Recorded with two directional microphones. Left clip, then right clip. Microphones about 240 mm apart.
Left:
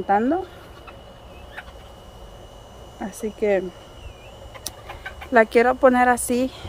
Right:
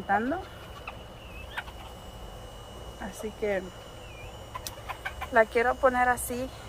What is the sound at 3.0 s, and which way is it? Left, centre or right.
Speech, left.